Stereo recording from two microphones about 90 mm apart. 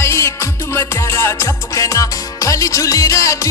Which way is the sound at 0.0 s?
30° left (ahead or behind).